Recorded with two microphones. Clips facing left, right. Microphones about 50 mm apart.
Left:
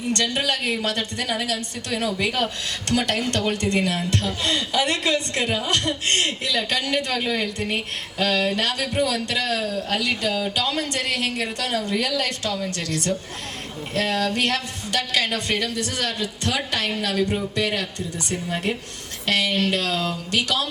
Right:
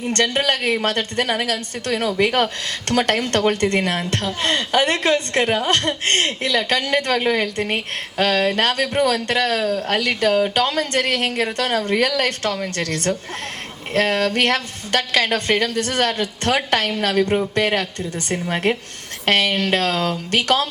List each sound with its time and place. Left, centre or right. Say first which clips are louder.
0.1 s a man's voice: right 4 dB; right